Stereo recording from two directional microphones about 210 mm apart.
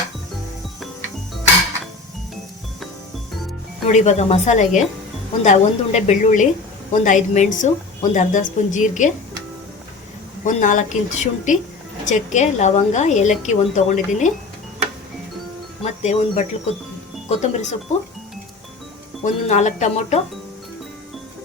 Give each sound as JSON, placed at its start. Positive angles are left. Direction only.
{"t": 3.8, "sound": "a woman's voice", "side_deg": 30}
{"t": 10.4, "sound": "a woman's voice", "side_deg": 35}
{"t": 15.8, "sound": "a woman's voice", "side_deg": 30}
{"t": 19.2, "sound": "a woman's voice", "side_deg": 35}